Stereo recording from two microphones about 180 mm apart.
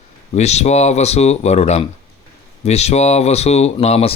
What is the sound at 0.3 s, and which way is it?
Speech, 40° left (ahead or behind).